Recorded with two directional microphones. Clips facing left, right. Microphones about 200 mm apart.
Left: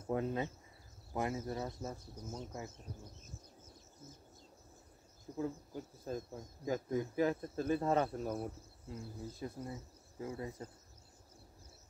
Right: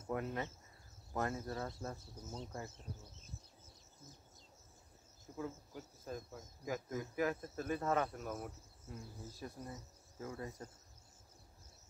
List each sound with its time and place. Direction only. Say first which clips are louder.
0.0 s speech: left 4 dB; 25° left (ahead or behind)
5.3 s speech: left 5 dB; 35° left (ahead or behind)
9.4 s speech: left 3 dB; 15° left (ahead or behind)